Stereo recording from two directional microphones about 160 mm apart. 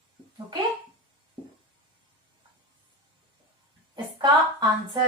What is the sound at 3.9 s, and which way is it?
Speech, 30° right (ahead or behind).